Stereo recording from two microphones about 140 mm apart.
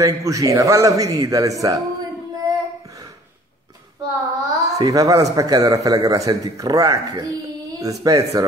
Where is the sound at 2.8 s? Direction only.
25° right (ahead or behind).